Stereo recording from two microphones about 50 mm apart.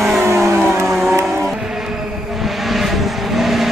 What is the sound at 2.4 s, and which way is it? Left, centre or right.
Vehicle, centre.